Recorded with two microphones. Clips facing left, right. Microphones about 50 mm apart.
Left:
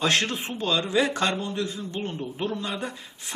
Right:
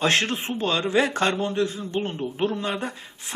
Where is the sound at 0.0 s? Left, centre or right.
Right.